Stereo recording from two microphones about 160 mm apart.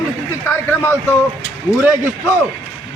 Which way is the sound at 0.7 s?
15° left (ahead or behind).